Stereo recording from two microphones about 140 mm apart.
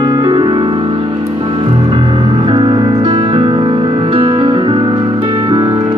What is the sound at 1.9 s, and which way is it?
Music, 35° right (ahead or behind).